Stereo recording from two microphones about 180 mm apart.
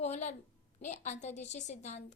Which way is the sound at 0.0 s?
40° left (ahead or behind).